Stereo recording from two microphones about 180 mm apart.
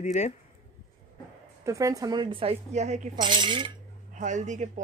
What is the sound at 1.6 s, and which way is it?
A woman's voice, 20° right (ahead or behind).